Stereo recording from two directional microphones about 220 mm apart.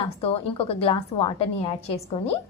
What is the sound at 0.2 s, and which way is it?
A woman's voice, 25° left (ahead or behind).